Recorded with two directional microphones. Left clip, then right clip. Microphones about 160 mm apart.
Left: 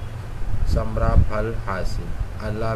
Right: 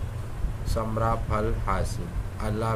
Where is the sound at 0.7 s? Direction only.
25° right (ahead or behind).